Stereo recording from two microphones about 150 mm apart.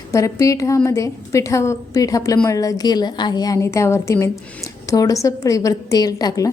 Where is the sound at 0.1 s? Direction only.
20° left (ahead or behind).